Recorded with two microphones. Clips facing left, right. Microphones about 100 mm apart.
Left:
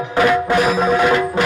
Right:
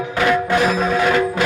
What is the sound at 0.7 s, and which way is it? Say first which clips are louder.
Speech: left 2 dB; 15° left (ahead or behind).